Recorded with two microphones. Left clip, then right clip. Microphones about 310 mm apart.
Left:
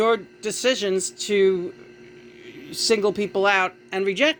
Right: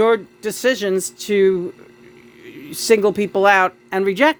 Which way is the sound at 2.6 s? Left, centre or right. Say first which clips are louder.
Right 6 dB; right.